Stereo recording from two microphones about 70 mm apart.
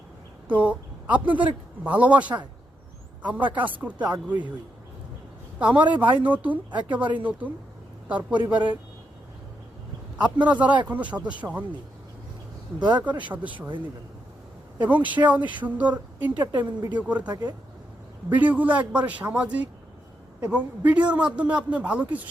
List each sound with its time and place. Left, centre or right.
0.5 s a man's voice: right
5.5 s a man's voice: centre
10.2 s a man's voice: right
12.8 s speech: right
13.1 s a man's voice: right
14.8 s a man's voice: right